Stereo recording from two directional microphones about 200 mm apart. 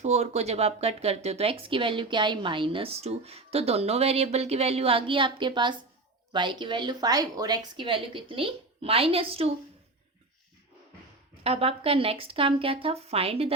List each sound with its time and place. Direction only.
0.0 s speech: 35° right (ahead or behind)
11.4 s speech: 30° right (ahead or behind)